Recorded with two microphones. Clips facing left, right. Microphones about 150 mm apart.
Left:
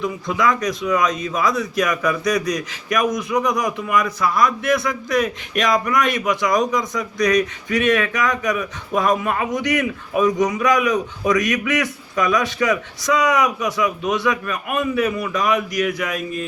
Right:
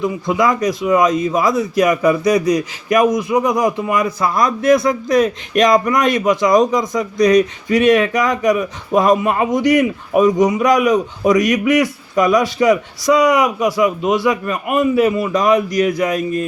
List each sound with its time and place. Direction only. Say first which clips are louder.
0.0 s speech: right 4 dB; 25° right (ahead or behind)
15.4 s speech: right 5 dB; 35° right (ahead or behind)